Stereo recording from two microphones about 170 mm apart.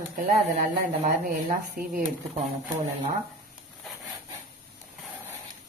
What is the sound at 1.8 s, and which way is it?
Speech, 55° right (ahead or behind).